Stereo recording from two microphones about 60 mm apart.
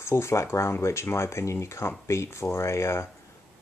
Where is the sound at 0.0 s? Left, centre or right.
Left.